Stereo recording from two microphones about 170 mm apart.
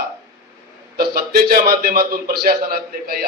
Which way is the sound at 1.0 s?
60° right (ahead or behind).